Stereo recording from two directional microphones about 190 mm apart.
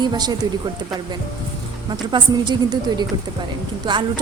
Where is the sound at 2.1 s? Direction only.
25° right (ahead or behind).